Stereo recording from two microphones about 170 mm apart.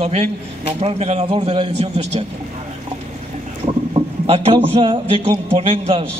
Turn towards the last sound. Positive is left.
turn(degrees=-35)  # may be behind; listen again after turning